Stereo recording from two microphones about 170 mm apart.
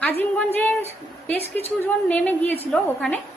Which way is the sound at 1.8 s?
10° left (ahead or behind).